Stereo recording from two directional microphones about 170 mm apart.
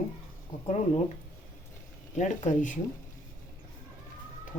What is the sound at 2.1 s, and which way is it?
Speech, 45° left (ahead or behind).